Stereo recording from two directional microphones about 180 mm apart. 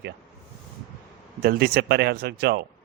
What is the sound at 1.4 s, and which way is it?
Speech, 55° right (ahead or behind).